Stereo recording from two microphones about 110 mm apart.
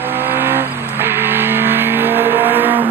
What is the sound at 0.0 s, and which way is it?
Vehicle, 20° right (ahead or behind).